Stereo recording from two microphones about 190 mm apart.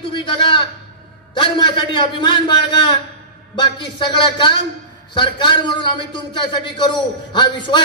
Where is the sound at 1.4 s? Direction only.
25° left (ahead or behind).